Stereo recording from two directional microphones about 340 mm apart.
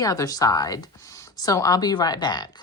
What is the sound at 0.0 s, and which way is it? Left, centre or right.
Speech, centre.